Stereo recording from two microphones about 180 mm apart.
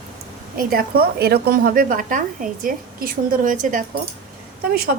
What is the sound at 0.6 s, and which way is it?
A woman's voice, 55° right (ahead or behind).